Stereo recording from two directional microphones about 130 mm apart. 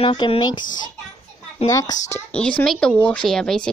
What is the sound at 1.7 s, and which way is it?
Speech, 25° left (ahead or behind).